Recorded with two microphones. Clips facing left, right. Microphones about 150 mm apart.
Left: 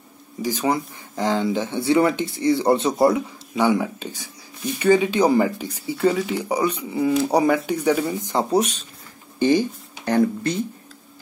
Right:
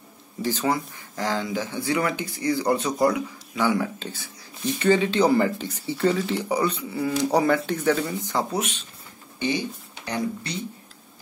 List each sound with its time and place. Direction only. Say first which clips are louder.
0.4 s speech: left 2 dB; 15° left (ahead or behind)
8.5 s speech: left 8 dB; 35° left (ahead or behind)
10.0 s speech: left 9 dB; 50° left (ahead or behind)